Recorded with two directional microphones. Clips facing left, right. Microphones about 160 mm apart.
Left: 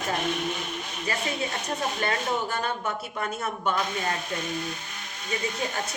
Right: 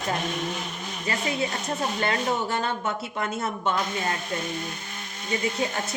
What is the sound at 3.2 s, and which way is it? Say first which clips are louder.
Speech: right 1 dB; 25° right (ahead or behind).